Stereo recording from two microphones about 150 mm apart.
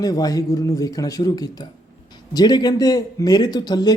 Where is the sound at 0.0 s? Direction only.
25° left (ahead or behind).